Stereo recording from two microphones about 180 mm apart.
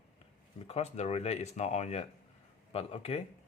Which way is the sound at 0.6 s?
35° left (ahead or behind).